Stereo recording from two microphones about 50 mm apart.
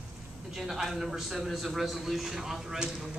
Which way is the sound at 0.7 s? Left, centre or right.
Centre.